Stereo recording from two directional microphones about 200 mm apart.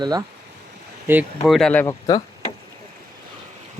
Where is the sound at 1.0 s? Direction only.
10° right (ahead or behind).